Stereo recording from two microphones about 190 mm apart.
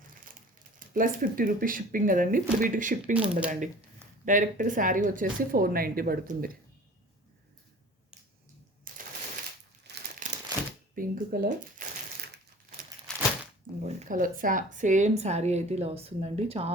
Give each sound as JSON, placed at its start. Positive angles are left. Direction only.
{"t": 0.8, "sound": "speech", "side_deg": -45}
{"t": 3.0, "sound": "speech", "side_deg": -5}
{"t": 3.5, "sound": "a woman's voice", "side_deg": -40}
{"t": 8.9, "sound": "a sound", "side_deg": -45}
{"t": 10.2, "sound": "crumpling", "side_deg": -45}
{"t": 10.9, "sound": "speech", "side_deg": -50}
{"t": 13.1, "sound": "a sound", "side_deg": 0}
{"t": 13.8, "sound": "a woman's voice", "side_deg": -40}